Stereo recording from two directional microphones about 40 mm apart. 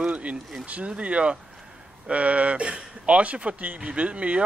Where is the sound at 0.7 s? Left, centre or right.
Right.